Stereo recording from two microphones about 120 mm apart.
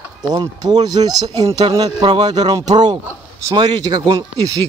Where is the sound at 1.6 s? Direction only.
40° right (ahead or behind).